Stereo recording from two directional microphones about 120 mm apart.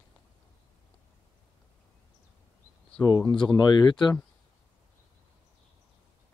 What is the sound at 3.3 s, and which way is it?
Speech, 40° left (ahead or behind).